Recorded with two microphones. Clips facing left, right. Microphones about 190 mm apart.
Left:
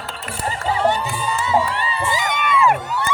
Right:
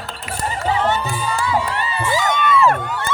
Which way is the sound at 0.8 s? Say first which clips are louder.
Left 1 dB; 15° left (ahead or behind).